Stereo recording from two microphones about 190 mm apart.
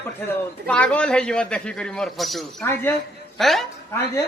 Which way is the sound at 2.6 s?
15° left (ahead or behind).